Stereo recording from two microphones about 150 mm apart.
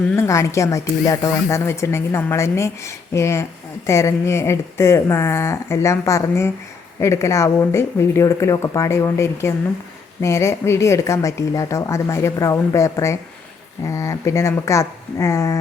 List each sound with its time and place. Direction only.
0.2 s speech: 20° left (ahead or behind)